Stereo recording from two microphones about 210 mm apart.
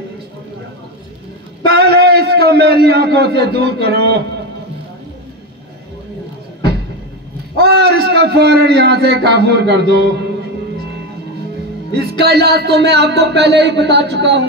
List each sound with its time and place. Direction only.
1.7 s a man's voice: 50° right (ahead or behind)
7.5 s a man's voice: 50° right (ahead or behind)
11.9 s speech: 50° right (ahead or behind)